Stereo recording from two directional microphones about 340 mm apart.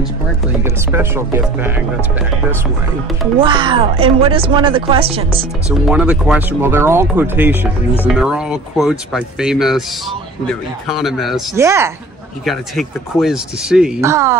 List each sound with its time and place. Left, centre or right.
0.7 s speech: centre
3.3 s speech: centre
5.9 s speech: centre